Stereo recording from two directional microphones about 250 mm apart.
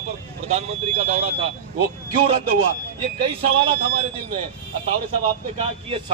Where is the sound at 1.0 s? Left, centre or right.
Right.